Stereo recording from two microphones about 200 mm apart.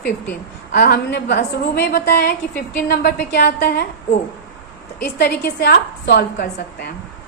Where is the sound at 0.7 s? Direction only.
50° left (ahead or behind).